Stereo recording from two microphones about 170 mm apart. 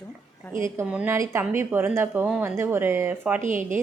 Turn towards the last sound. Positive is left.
turn(degrees=-50)  # may be behind; listen again after turning